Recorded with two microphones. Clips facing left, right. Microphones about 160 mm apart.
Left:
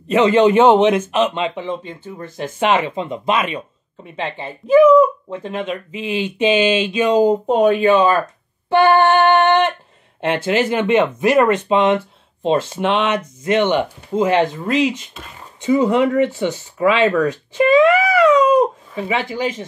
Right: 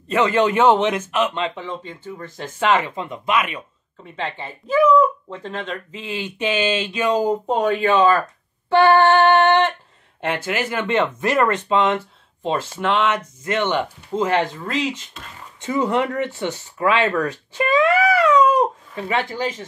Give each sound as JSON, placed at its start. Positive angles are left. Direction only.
{"t": 0.1, "sound": "a man's voice", "side_deg": 20}
{"t": 8.6, "sound": "a sound", "side_deg": 15}
{"t": 10.2, "sound": "a man's voice", "side_deg": 25}
{"t": 18.9, "sound": "speech", "side_deg": 10}